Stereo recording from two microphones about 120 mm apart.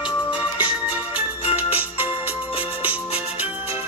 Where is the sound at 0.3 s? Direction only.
10° right (ahead or behind).